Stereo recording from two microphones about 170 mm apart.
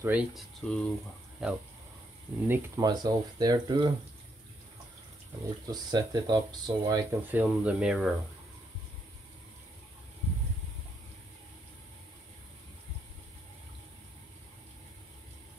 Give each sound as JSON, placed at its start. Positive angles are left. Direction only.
{"t": 0.0, "sound": "speech", "side_deg": -5}
{"t": 2.8, "sound": "speech", "side_deg": -25}
{"t": 5.7, "sound": "speech", "side_deg": -25}
{"t": 7.2, "sound": "speech", "side_deg": -10}